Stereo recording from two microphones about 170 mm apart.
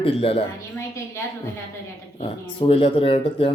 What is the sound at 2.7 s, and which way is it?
Speech, 35° left (ahead or behind).